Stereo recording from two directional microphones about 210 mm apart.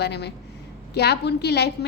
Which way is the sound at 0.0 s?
50° left (ahead or behind).